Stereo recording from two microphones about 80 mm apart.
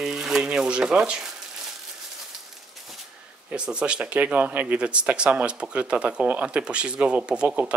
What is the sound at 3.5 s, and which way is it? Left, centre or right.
Speech, centre.